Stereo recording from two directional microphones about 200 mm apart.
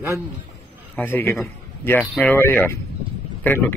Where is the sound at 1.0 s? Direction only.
10° left (ahead or behind).